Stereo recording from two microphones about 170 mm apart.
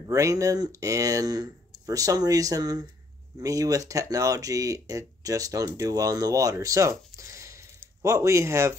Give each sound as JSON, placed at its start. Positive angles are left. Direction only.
{"t": 0.0, "sound": "speech", "side_deg": -20}